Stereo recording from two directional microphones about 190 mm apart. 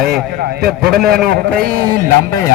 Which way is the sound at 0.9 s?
55° right (ahead or behind).